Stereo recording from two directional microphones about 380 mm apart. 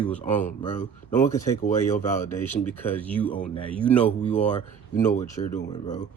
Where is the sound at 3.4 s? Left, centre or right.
Centre.